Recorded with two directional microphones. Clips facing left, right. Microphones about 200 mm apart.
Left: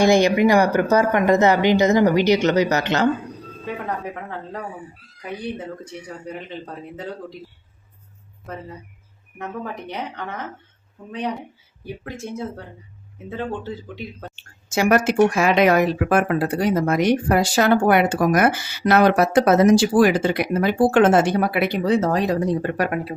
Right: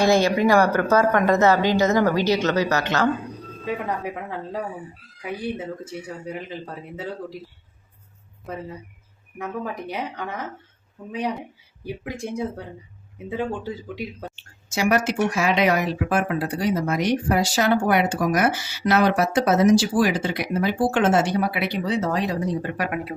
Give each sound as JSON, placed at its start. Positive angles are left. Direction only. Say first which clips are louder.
{"t": 0.0, "sound": "speech", "louder": "left 3 dB", "side_deg": 15}
{"t": 3.8, "sound": "speech", "louder": "even", "side_deg": -10}
{"t": 9.4, "sound": "speech", "louder": "right 1 dB", "side_deg": -10}
{"t": 12.0, "sound": "speech", "louder": "right 2 dB", "side_deg": -15}
{"t": 14.7, "sound": "speech", "louder": "left 4 dB", "side_deg": 50}